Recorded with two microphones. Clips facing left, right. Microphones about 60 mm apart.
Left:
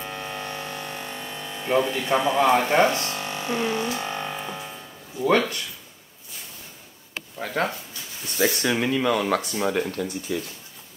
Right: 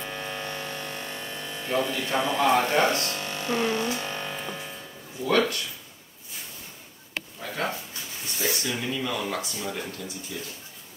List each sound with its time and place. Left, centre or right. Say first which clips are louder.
0.0 s mains hum: left 1 dB; centre
1.7 s speech: left 5 dB; left
2.7 s music: left 3 dB; left; by 4.7 s centre
5.2 s speech: left 3 dB; left
7.3 s a sound: left 8 dB; left
8.4 s speech: left 7 dB; left